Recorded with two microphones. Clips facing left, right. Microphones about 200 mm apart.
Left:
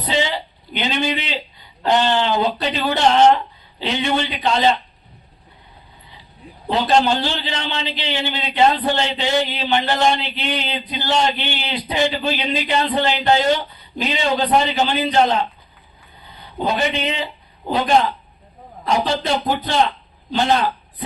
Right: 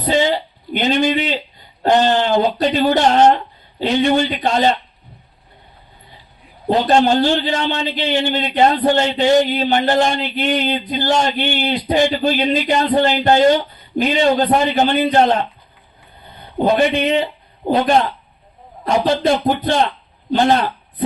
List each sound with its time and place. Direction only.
0.0 s a sound: 45° right (ahead or behind)
1.8 s a man's voice: 45° right (ahead or behind)
6.7 s a man's voice: 45° right (ahead or behind)
18.9 s a man's voice: 50° right (ahead or behind)